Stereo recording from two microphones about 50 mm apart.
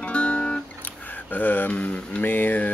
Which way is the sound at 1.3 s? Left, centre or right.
Left.